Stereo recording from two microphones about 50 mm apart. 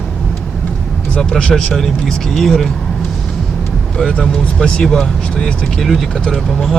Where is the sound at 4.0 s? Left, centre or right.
Centre.